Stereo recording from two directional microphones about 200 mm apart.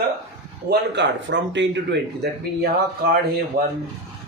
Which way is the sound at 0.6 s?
60° right (ahead or behind).